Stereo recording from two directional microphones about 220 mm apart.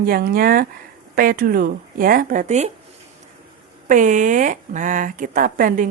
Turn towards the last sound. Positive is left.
turn(degrees=-40)  # may be behind; listen again after turning